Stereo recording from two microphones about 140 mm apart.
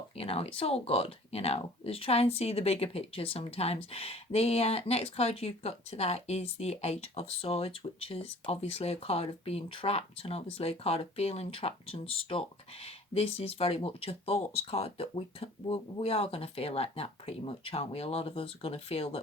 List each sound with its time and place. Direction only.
0.2 s speech: 45° left (ahead or behind)